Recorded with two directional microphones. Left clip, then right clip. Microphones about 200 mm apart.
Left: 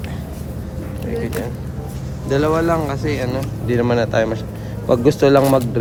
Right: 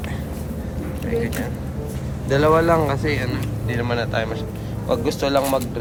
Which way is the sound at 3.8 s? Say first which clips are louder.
Left 6 dB; 50° left (ahead or behind).